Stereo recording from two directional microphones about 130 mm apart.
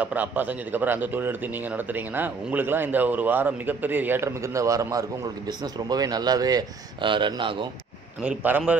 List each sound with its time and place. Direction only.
0.0 s a man's voice: 10° right (ahead or behind); by 7.6 s 40° right (ahead or behind)
8.2 s a man's voice: 10° right (ahead or behind)